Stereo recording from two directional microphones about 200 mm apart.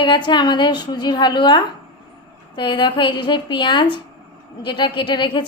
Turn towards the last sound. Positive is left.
turn(degrees=25)  # may be behind; listen again after turning